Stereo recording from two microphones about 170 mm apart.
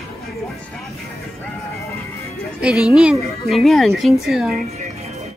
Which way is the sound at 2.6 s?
5° right (ahead or behind).